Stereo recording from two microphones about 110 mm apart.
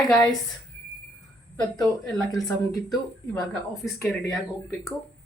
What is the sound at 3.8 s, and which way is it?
Speech, centre (ahead or behind).